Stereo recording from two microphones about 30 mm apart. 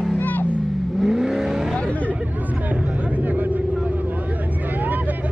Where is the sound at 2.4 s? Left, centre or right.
Right.